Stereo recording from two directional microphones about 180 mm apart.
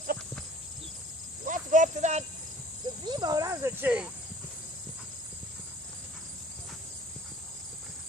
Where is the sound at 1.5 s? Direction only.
45° right (ahead or behind).